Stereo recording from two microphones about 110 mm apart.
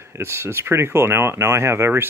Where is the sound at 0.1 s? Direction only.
25° right (ahead or behind).